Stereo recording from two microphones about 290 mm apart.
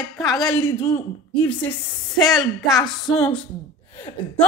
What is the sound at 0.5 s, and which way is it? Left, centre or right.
A woman's voice, centre.